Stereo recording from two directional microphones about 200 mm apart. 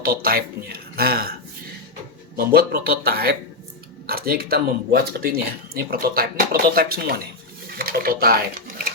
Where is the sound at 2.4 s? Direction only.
50° right (ahead or behind).